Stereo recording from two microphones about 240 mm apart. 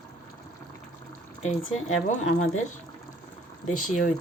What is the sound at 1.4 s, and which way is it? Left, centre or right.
Speech, left.